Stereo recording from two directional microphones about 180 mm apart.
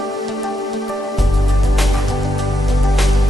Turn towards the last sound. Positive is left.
turn(degrees=0)  # may be behind; listen again after turning